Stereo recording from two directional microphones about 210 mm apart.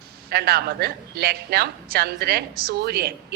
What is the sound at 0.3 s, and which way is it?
A woman's voice, 50° right (ahead or behind).